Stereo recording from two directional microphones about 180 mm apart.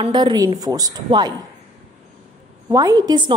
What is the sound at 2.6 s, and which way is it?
Speech, 20° right (ahead or behind).